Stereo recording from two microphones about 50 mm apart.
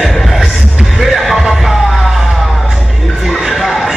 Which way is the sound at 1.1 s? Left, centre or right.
Centre.